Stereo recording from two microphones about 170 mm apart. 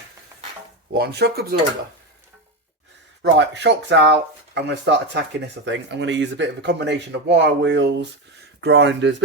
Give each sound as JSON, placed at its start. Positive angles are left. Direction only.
{"t": 0.9, "sound": "speech", "side_deg": -70}
{"t": 3.3, "sound": "speech", "side_deg": -90}